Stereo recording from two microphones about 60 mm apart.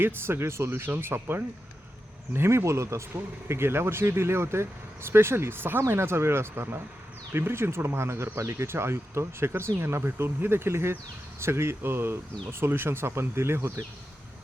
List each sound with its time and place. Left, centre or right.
0.0 s speech: right
3.5 s speech: right